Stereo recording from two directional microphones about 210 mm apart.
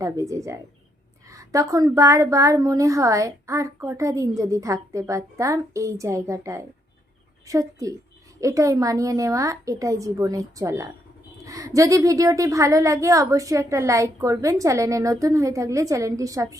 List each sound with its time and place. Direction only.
0.0 s a woman's voice: 15° right (ahead or behind)